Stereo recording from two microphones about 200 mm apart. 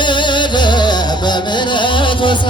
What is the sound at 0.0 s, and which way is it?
Music, 25° left (ahead or behind).